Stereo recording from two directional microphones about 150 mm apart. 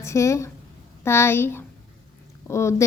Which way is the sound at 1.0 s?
15° left (ahead or behind).